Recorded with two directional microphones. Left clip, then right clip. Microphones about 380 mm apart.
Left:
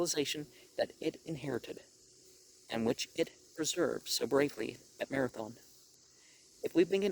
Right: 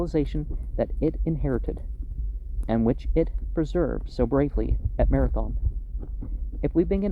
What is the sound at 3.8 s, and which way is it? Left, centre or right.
Speech, left.